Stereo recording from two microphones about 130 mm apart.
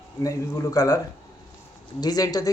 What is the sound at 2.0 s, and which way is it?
Speech, 30° left (ahead or behind).